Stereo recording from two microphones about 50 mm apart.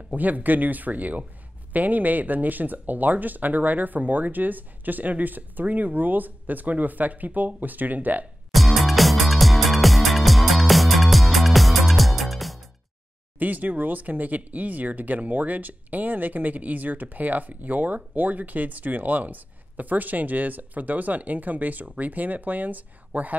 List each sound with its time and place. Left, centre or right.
0.1 s speech: right
8.5 s music: centre
13.4 s speech: right